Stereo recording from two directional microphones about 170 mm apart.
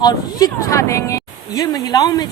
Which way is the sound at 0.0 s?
25° left (ahead or behind).